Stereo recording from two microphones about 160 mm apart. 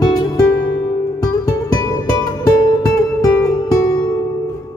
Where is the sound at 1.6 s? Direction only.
25° left (ahead or behind).